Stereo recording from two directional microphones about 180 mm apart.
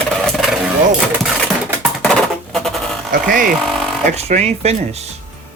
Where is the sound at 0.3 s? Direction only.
Centre (ahead or behind).